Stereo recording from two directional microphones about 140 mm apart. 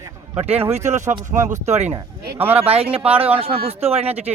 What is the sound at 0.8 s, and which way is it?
Speech, 55° right (ahead or behind).